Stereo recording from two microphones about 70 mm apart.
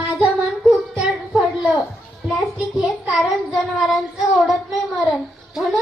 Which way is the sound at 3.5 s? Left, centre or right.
Centre.